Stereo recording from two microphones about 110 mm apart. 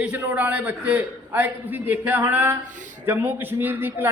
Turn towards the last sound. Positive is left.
turn(degrees=-20)  # may be behind; listen again after turning